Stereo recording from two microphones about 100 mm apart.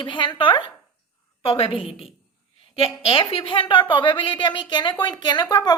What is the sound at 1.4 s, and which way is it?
A woman's voice, 75° left (ahead or behind).